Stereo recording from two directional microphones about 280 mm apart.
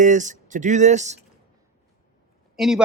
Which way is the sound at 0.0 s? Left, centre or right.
Right.